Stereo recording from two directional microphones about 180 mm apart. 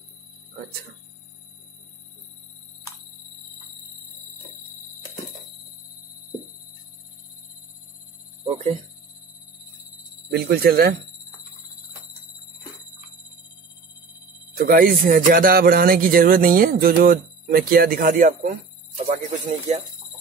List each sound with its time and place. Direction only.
10.3 s speech: 60° right (ahead or behind)
14.6 s a man's voice: 55° right (ahead or behind)